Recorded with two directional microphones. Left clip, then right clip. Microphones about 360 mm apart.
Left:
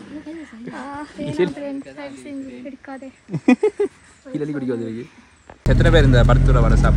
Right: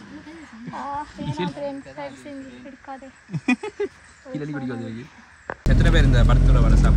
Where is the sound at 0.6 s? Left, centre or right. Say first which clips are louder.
Right 3 dB; centre.